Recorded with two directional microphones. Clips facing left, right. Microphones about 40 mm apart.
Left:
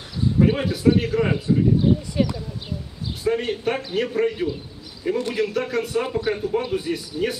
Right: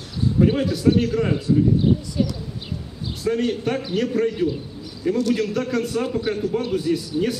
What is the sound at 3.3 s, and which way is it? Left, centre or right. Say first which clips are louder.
A man's voice: right 1 dB; centre.